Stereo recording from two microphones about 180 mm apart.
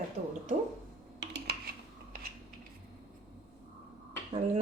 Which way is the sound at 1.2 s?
70° right (ahead or behind).